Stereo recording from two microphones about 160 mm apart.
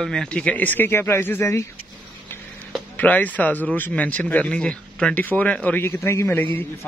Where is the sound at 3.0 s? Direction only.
10° left (ahead or behind).